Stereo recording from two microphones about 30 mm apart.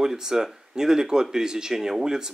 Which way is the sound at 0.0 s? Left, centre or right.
Centre.